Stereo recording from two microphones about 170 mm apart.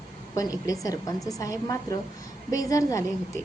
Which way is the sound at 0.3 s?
20° left (ahead or behind).